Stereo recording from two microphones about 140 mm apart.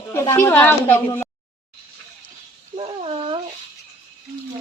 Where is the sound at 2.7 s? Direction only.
45° right (ahead or behind).